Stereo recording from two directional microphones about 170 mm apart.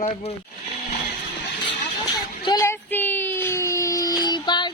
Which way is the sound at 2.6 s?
15° left (ahead or behind).